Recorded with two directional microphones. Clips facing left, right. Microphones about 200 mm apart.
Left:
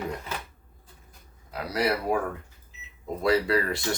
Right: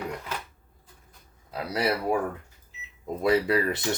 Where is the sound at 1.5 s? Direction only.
25° right (ahead or behind).